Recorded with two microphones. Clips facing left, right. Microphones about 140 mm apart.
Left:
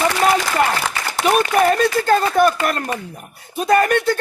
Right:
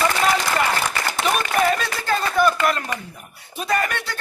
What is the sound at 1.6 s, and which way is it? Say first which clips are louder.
Speech: left 6 dB; 45° left (ahead or behind).